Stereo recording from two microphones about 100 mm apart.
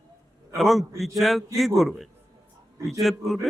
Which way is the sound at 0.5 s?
Centre (ahead or behind).